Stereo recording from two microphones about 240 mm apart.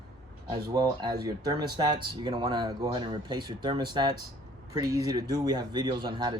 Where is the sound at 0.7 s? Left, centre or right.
Centre.